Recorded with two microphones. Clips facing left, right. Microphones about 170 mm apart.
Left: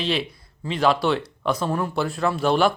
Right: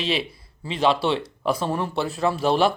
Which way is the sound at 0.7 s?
30° right (ahead or behind).